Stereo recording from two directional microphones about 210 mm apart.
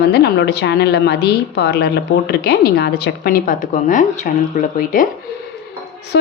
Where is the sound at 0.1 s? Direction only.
55° left (ahead or behind).